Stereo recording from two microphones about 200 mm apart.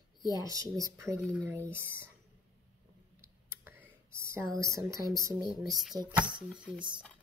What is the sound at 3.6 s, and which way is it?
Whispering, 10° right (ahead or behind).